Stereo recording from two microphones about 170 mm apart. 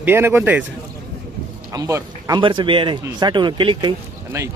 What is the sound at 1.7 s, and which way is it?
Speech, 20° right (ahead or behind).